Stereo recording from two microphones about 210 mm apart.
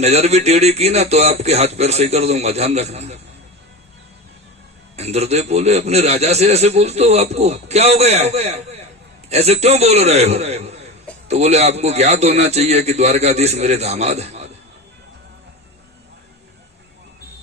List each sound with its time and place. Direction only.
0.0 s a man's voice: 30° right (ahead or behind)
4.9 s a man's voice: 30° right (ahead or behind)